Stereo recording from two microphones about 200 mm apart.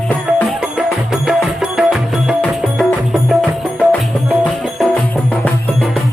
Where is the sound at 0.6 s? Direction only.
5° right (ahead or behind).